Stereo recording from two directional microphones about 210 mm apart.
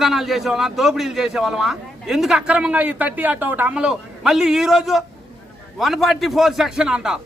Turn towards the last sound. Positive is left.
turn(degrees=-5)  # may be behind; listen again after turning